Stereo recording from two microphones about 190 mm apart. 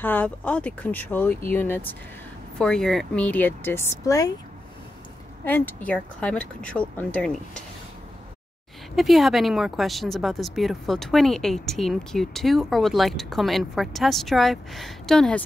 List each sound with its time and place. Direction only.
0.0 s speech: 10° left (ahead or behind)
5.4 s speech: 10° left (ahead or behind)
8.9 s speech: centre (ahead or behind)